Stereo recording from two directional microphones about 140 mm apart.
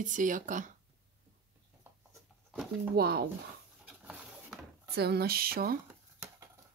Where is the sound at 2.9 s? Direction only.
90° right.